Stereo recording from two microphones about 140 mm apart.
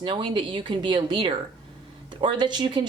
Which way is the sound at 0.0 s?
40° right (ahead or behind).